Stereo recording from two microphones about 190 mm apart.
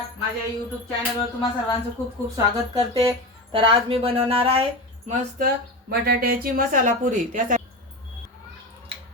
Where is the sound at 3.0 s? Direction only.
20° right (ahead or behind).